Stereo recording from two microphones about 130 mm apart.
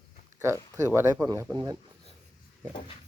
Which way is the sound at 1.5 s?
30° right (ahead or behind).